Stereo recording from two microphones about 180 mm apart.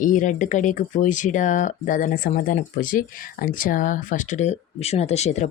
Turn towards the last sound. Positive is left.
turn(degrees=40)  # may be behind; listen again after turning